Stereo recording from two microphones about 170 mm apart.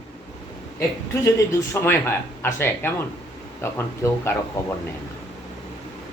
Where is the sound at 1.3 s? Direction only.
15° left (ahead or behind).